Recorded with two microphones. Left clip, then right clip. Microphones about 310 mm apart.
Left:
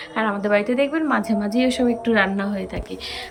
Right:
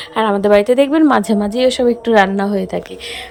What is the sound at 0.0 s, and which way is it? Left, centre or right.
A woman's voice, right.